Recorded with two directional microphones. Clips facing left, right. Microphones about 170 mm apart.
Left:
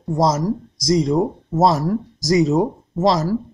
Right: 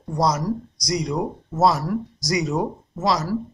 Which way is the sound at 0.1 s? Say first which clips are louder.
Left 4 dB; 20° left (ahead or behind).